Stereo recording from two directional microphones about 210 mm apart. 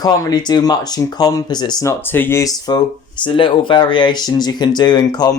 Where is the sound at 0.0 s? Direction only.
20° left (ahead or behind).